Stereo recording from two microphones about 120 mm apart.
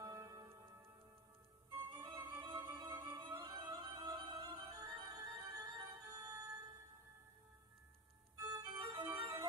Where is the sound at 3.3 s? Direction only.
25° right (ahead or behind).